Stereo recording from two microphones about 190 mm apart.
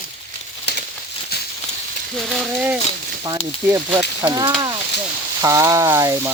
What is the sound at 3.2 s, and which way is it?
Speech, 20° right (ahead or behind).